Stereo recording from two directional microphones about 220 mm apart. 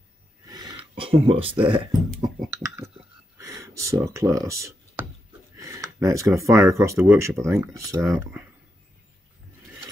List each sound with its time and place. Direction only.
0.5 s speech: 15° right (ahead or behind)
2.2 s a sound: 10° right (ahead or behind)
3.3 s speech: 15° right (ahead or behind)